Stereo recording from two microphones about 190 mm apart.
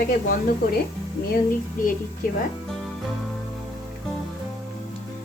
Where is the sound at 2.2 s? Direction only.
50° left (ahead or behind).